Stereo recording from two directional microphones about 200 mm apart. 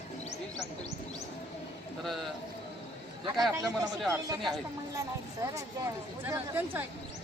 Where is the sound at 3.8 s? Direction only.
15° right (ahead or behind).